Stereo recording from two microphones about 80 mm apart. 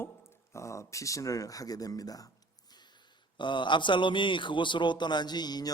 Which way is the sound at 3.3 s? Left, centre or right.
Left.